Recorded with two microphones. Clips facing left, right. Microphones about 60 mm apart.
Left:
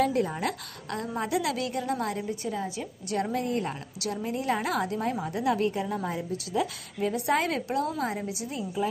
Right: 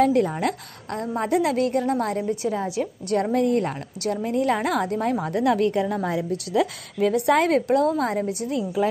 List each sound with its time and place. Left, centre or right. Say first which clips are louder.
0.0 s a woman's voice: right 6 dB; right
2.4 s a woman's voice: right 7 dB; right
2.8 s a woman's voice: right 7 dB; right
5.3 s a woman's voice: right 6 dB; right
8.5 s a woman's voice: right 7 dB; right